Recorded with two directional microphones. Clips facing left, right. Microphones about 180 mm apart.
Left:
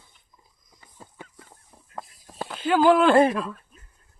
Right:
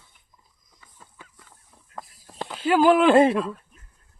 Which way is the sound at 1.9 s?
5° left (ahead or behind).